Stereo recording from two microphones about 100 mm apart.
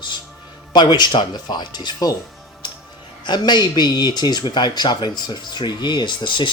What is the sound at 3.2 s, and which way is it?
Speech, 50° left (ahead or behind).